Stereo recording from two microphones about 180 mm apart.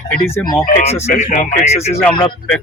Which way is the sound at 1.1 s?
45° left (ahead or behind).